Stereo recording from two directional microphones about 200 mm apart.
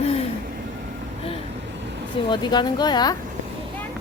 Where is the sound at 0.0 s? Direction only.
30° left (ahead or behind).